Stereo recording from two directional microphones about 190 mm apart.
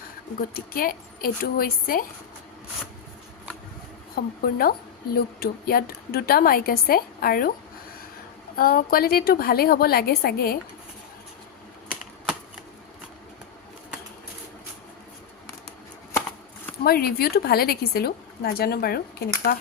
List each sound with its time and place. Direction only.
0.3 s a woman's voice: 50° left (ahead or behind)
4.1 s a woman's voice: 50° left (ahead or behind)
8.5 s a woman's voice: 50° left (ahead or behind)
16.8 s a woman's voice: 55° left (ahead or behind)